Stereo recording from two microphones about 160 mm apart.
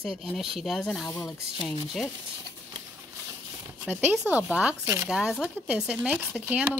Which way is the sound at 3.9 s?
10° right (ahead or behind).